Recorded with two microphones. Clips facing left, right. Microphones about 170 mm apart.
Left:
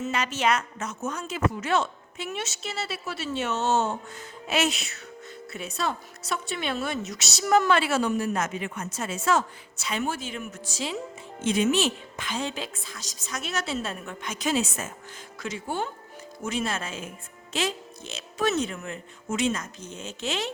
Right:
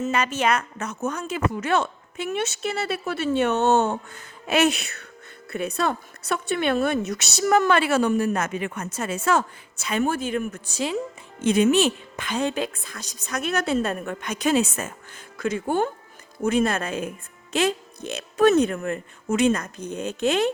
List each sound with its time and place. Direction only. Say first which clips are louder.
0.0 s a woman's voice: right 3 dB; 50° right (ahead or behind)